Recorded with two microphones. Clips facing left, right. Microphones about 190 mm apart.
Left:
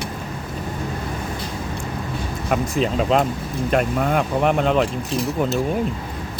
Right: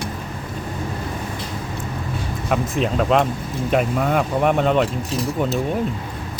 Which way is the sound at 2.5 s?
Centre (ahead or behind).